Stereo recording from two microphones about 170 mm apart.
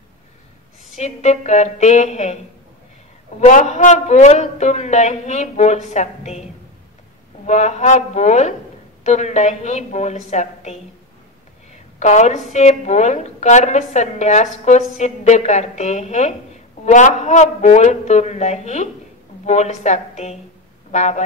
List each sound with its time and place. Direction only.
0.9 s a woman's voice: 45° left (ahead or behind)
3.3 s a woman's voice: 45° left (ahead or behind)
7.4 s a woman's voice: 40° left (ahead or behind)
12.0 s a woman's voice: 45° left (ahead or behind)